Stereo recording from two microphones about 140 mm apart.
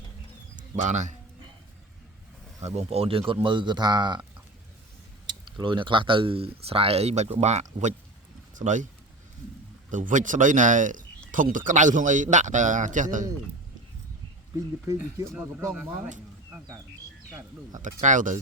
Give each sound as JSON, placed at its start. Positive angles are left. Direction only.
{"t": 0.8, "sound": "speech", "side_deg": -60}
{"t": 2.6, "sound": "speech", "side_deg": -50}
{"t": 5.5, "sound": "speech", "side_deg": -35}
{"t": 9.9, "sound": "speech", "side_deg": -65}
{"t": 15.4, "sound": "speech", "side_deg": -10}
{"t": 17.8, "sound": "speech", "side_deg": -65}